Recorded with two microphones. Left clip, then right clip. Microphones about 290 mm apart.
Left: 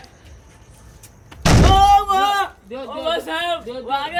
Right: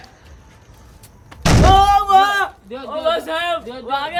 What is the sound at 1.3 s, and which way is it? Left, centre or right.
Speech, centre.